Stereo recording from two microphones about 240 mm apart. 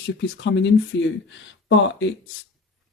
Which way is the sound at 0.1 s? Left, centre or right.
Left.